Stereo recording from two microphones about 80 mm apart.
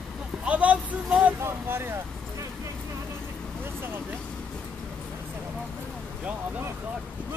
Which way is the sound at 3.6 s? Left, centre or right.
Right.